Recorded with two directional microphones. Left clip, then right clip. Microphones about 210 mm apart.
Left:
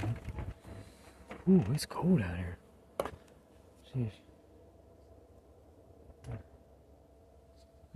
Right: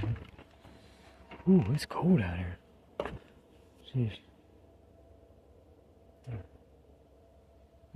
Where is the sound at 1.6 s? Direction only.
25° right (ahead or behind).